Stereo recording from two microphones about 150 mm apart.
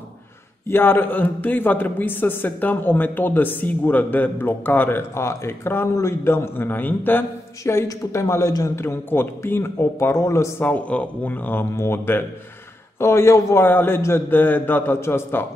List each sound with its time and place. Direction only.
0.7 s a man's voice: 15° left (ahead or behind)